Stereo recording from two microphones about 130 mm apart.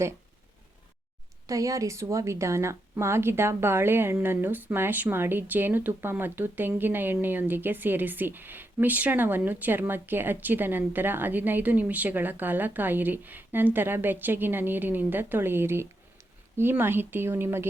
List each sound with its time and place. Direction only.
1.5 s a woman's voice: 25° right (ahead or behind)